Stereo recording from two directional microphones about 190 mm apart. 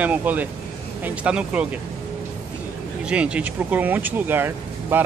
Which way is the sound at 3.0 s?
5° right (ahead or behind).